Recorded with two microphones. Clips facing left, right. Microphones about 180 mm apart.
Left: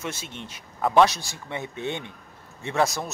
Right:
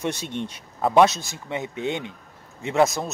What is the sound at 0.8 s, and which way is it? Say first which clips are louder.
A man's voice: right 2 dB; 20° right (ahead or behind).